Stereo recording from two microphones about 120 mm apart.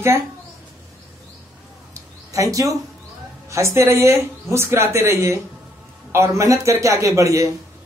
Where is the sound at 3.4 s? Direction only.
25° right (ahead or behind).